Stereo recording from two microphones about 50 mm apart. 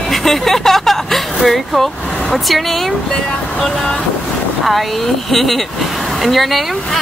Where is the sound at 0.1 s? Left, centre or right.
Centre.